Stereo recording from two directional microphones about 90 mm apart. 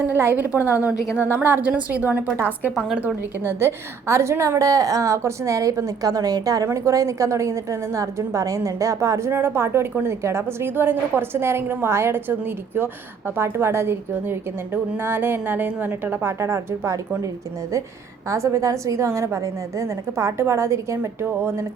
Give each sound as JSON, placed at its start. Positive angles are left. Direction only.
{"t": 0.2, "sound": "a woman's voice", "side_deg": -25}
{"t": 1.1, "sound": "a woman's voice", "side_deg": 25}
{"t": 1.4, "sound": "a woman's voice", "side_deg": -20}
{"t": 18.3, "sound": "a woman's voice", "side_deg": -35}